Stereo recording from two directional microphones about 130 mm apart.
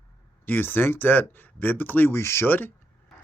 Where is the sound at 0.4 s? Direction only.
15° left (ahead or behind).